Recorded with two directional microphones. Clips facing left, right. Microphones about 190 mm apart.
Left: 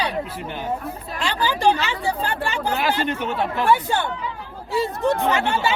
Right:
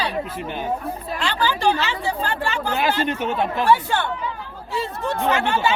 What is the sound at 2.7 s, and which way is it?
Speech, 20° right (ahead or behind).